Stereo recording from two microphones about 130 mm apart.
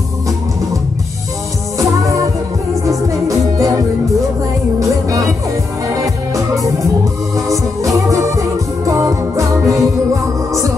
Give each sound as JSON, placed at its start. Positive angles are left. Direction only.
{"t": 2.9, "sound": "music", "side_deg": -25}
{"t": 4.7, "sound": "music", "side_deg": -25}